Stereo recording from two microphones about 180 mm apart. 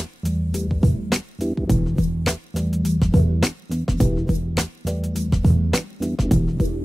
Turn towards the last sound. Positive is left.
turn(degrees=0)  # may be behind; listen again after turning